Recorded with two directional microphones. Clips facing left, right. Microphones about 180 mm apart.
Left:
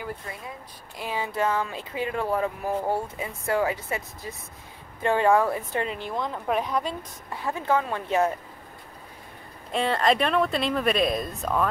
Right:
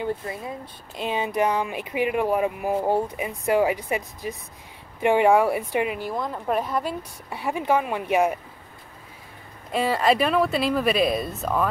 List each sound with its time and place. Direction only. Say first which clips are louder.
0.9 s speech: right 4 dB; 20° right (ahead or behind)
9.7 s speech: right 2 dB; 5° right (ahead or behind)